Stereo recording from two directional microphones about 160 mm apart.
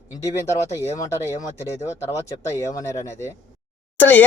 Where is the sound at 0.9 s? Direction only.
20° left (ahead or behind).